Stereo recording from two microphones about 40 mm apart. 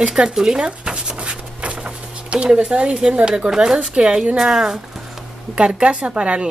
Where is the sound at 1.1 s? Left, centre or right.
Right.